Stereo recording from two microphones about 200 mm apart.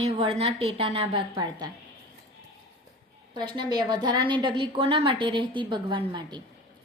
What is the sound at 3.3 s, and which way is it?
A woman's voice, 20° right (ahead or behind).